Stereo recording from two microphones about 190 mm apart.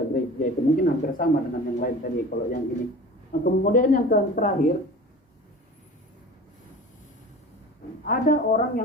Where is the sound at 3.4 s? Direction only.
50° left (ahead or behind).